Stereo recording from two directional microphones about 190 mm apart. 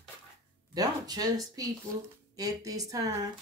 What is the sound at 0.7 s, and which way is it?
Speech, 20° right (ahead or behind).